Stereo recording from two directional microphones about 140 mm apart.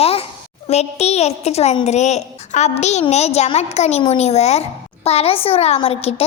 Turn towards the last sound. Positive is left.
turn(degrees=45)  # may be behind; listen again after turning